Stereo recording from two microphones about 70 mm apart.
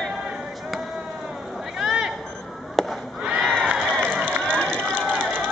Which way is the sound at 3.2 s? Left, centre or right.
Centre.